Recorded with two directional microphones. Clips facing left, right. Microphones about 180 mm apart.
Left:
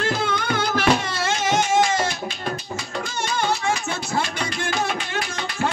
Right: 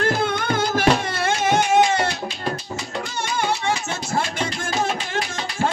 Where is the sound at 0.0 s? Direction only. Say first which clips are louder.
Right 2 dB; 50° right (ahead or behind).